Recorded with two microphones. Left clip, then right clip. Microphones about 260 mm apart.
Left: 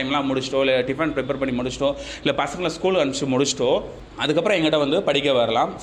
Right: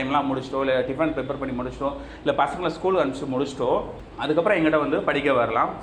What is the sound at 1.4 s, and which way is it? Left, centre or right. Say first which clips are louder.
A man's voice: left 5 dB; left.